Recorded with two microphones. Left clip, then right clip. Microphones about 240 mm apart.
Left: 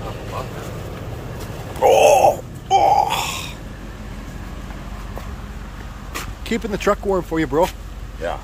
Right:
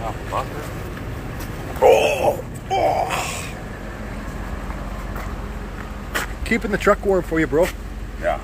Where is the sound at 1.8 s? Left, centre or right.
Centre.